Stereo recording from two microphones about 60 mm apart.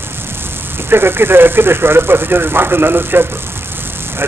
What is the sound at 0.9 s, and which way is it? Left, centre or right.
Speech, right.